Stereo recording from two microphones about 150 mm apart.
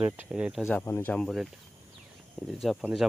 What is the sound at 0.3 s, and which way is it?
Speech, 5° right (ahead or behind).